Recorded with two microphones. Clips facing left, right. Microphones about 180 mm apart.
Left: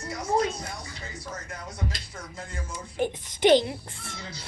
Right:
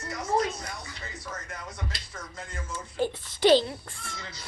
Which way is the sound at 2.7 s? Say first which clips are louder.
Even; 15° left (ahead or behind).